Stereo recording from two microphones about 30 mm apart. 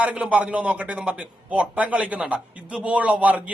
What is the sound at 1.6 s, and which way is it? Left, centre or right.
A man's voice, right.